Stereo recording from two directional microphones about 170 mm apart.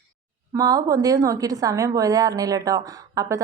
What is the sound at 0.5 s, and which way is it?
A woman's voice, 20° right (ahead or behind).